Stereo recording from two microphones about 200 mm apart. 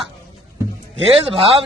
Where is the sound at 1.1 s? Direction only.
30° right (ahead or behind).